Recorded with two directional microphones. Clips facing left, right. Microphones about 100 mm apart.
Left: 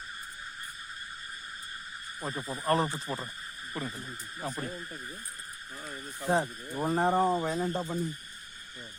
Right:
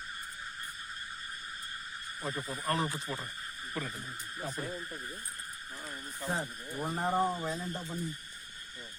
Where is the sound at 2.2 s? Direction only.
35° left (ahead or behind).